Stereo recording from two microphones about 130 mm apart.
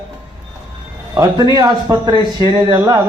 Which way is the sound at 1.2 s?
30° right (ahead or behind).